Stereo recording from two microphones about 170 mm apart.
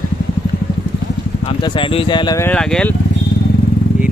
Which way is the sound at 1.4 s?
30° left (ahead or behind).